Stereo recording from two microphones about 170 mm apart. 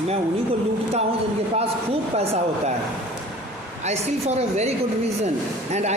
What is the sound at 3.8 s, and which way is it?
Speech, 40° right (ahead or behind).